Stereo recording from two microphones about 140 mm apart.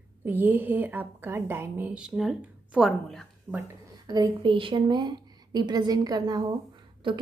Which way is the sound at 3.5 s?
30° right (ahead or behind).